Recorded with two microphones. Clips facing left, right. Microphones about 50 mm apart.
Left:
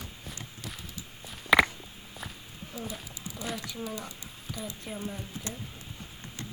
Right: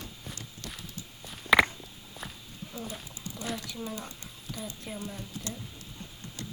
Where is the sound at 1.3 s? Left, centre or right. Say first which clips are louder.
Even; centre.